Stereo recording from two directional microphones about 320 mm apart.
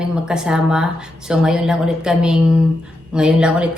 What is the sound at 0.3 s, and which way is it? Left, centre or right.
A woman's voice, centre.